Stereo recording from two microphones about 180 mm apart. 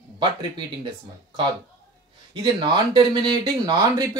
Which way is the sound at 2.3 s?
25° right (ahead or behind).